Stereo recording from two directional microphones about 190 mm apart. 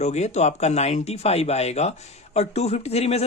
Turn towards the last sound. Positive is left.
turn(degrees=35)  # may be behind; listen again after turning